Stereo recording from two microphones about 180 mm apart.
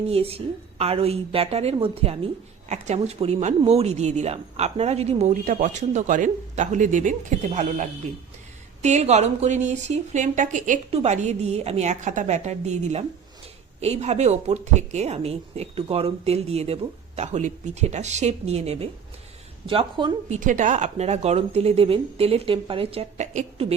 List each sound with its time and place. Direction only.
0.1 s a woman's voice: 35° right (ahead or behind)
20.3 s a woman's voice: 45° right (ahead or behind)